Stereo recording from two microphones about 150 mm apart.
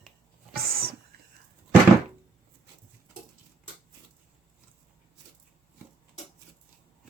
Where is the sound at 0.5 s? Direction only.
90° right.